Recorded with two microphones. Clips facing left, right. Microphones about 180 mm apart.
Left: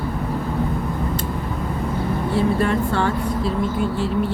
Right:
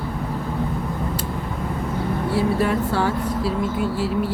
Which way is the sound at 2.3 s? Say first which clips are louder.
Left 1 dB; 5° right (ahead or behind).